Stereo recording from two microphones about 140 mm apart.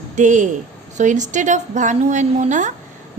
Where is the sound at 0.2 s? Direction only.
60° right (ahead or behind).